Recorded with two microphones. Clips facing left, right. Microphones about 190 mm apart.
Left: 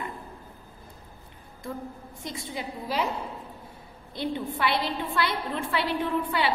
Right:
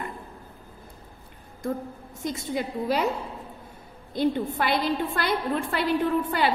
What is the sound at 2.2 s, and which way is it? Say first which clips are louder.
Speech: right 6 dB; 50° right (ahead or behind).